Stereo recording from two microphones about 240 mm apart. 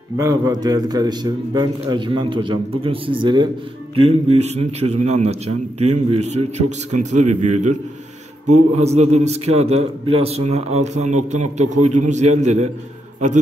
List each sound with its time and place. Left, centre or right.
0.2 s a man's voice: centre
8.7 s a man's voice: right